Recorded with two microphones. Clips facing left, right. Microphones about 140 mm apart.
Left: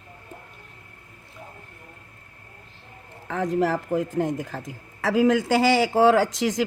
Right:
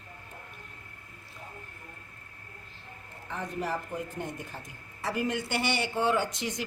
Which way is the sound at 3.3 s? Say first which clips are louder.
Left 10 dB; 90° left.